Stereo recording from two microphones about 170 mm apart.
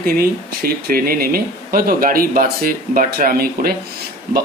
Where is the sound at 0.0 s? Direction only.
60° right (ahead or behind).